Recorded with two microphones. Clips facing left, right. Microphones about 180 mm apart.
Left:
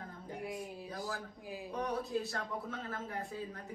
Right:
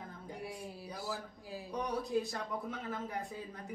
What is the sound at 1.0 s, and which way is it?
Speech, 15° left (ahead or behind).